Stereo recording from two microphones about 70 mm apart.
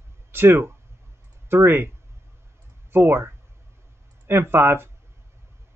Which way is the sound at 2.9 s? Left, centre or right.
Right.